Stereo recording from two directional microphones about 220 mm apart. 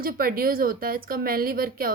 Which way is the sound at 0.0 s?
40° right (ahead or behind).